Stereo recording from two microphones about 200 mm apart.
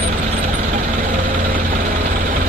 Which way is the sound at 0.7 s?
45° right (ahead or behind).